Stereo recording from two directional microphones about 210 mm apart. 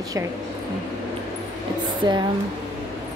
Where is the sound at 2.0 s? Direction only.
20° right (ahead or behind).